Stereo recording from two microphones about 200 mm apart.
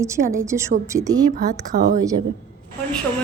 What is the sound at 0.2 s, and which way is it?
Speech, 55° right (ahead or behind).